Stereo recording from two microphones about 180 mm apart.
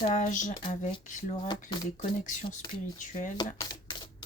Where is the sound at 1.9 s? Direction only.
45° left (ahead or behind).